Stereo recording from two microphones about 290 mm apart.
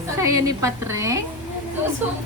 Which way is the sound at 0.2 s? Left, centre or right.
Centre.